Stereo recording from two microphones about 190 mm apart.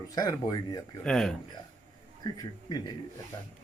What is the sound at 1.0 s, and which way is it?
Speech, 5° left (ahead or behind).